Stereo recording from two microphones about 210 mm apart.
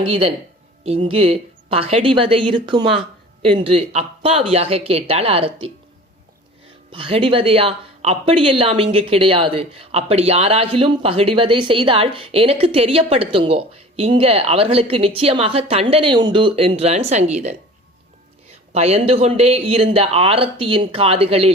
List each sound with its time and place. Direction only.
0.0 s speech: 25° right (ahead or behind)
6.9 s speech: 25° right (ahead or behind)
18.7 s speech: 30° right (ahead or behind)